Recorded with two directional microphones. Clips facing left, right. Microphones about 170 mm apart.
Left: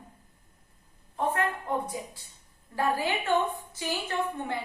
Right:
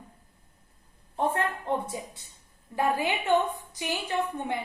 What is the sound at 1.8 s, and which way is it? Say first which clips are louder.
A woman's voice: even; 25° right (ahead or behind).